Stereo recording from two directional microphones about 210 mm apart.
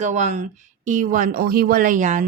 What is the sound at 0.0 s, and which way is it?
A woman's voice, 35° right (ahead or behind).